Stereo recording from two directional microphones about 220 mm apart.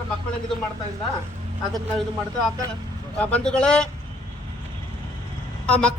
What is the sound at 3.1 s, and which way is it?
Speech, 5° left (ahead or behind).